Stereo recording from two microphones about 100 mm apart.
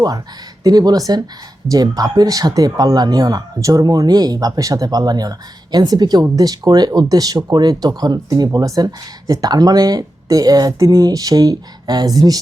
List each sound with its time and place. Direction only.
0.6 s a woman's voice: 40° right (ahead or behind)